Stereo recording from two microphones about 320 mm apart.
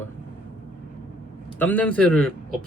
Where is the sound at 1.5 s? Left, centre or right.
Centre.